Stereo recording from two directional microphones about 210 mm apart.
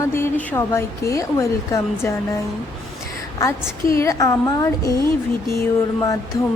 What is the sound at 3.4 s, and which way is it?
A woman's voice, 15° left (ahead or behind).